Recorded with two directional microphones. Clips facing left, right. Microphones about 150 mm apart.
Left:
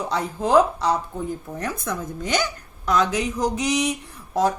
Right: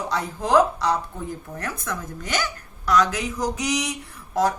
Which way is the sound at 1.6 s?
15° left (ahead or behind).